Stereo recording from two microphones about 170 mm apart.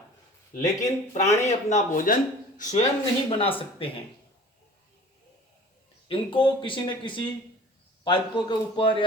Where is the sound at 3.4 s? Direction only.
30° left (ahead or behind).